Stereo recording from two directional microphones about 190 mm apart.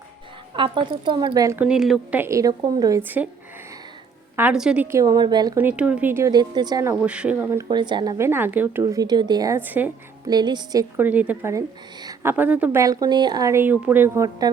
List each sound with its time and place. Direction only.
0.5 s a woman's voice: 25° right (ahead or behind)
1.6 s speech: 5° right (ahead or behind)
4.4 s speech: 5° right (ahead or behind); by 5.5 s 20° right (ahead or behind)
5.5 s speech: 10° right (ahead or behind)
7.0 s speech: 5° right (ahead or behind)
7.7 s speech: 25° right (ahead or behind)
8.8 s a woman's voice: 20° right (ahead or behind)
10.2 s speech: 20° right (ahead or behind)